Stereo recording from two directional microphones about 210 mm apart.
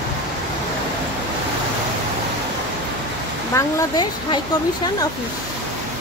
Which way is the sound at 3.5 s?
15° left (ahead or behind).